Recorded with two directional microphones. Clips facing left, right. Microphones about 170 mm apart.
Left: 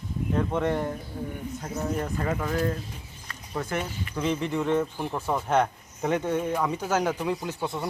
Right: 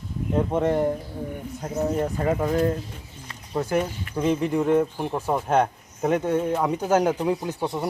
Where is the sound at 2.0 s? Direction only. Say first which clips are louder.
Right 5 dB; 25° right (ahead or behind).